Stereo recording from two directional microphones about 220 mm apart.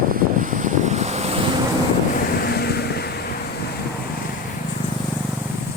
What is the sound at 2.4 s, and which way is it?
Vehicle, 45° left (ahead or behind).